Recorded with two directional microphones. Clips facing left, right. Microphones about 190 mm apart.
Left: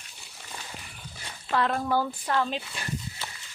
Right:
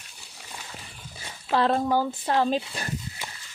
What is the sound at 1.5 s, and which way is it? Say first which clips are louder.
Speech: right 3 dB; 30° right (ahead or behind).